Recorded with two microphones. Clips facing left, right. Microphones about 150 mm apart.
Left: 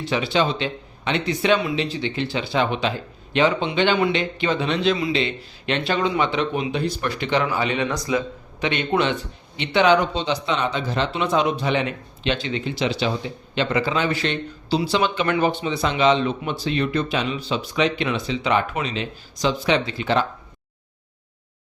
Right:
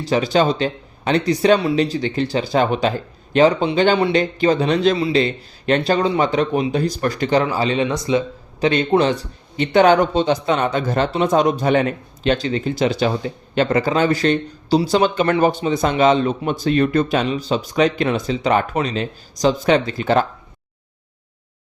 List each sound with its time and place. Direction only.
0.0 s speech: 40° right (ahead or behind); by 8.2 s 25° right (ahead or behind)
8.6 s speech: 35° right (ahead or behind)